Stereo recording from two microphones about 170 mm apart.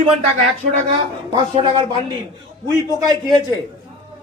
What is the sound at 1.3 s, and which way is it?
Speech, 35° right (ahead or behind).